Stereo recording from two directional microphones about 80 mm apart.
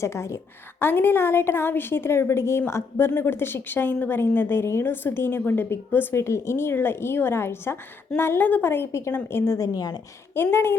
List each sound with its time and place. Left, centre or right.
0.0 s a woman's voice: left
0.8 s a woman's voice: left
9.6 s a woman's voice: left
10.3 s a woman's voice: left